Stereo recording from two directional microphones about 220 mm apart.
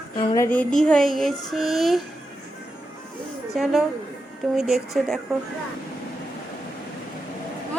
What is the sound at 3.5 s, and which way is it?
Music, centre (ahead or behind).